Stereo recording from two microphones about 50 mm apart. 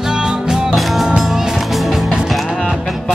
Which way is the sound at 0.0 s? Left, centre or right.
Centre.